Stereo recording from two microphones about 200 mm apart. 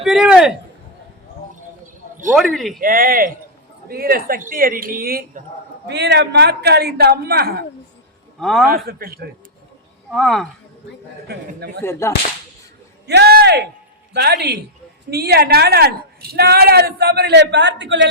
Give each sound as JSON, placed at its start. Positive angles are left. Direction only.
{"t": 0.0, "sound": "speech", "side_deg": 0}
{"t": 2.3, "sound": "speech", "side_deg": 0}
{"t": 2.8, "sound": "speech", "side_deg": -45}
{"t": 5.9, "sound": "speech", "side_deg": -55}
{"t": 8.4, "sound": "speech", "side_deg": 0}
{"t": 8.7, "sound": "speech", "side_deg": -50}
{"t": 10.1, "sound": "speech", "side_deg": 0}
{"t": 11.3, "sound": "a man's voice", "side_deg": -55}
{"t": 11.8, "sound": "whip", "side_deg": 15}
{"t": 13.1, "sound": "a man's voice", "side_deg": -55}